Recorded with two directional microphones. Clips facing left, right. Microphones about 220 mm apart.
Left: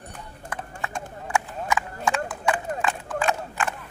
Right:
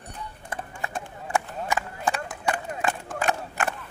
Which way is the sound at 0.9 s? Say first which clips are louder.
Even; 35° right (ahead or behind).